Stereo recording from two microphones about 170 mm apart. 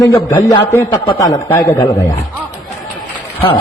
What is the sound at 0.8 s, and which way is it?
Speech, 30° left (ahead or behind).